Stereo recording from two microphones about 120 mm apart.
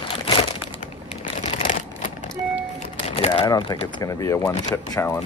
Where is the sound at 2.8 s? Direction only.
65° left (ahead or behind).